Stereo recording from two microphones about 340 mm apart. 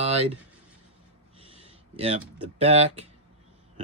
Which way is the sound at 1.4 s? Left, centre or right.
Centre.